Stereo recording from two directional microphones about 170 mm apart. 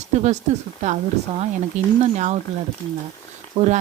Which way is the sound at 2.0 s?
45° right (ahead or behind).